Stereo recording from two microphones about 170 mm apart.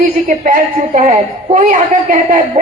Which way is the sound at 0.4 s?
50° right (ahead or behind).